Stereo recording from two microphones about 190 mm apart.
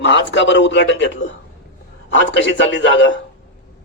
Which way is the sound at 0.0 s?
70° left (ahead or behind).